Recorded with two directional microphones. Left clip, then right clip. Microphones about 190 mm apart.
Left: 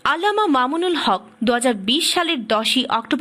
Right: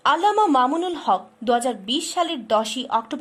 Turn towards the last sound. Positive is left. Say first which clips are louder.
# left 5 dB
turn(degrees=15)  # may be behind; listen again after turning